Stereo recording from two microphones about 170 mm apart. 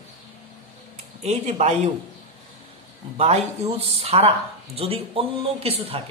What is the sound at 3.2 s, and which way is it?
Speech, 40° right (ahead or behind).